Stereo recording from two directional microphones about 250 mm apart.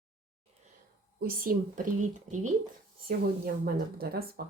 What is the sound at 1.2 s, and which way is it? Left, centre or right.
Speech, right.